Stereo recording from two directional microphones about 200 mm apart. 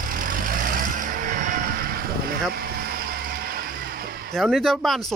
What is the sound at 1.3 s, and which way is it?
Music, 40° right (ahead or behind).